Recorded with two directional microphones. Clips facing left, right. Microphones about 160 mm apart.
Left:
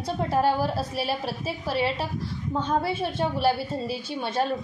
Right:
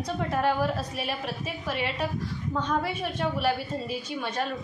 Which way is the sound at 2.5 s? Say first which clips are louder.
Left 3 dB; 30° left (ahead or behind).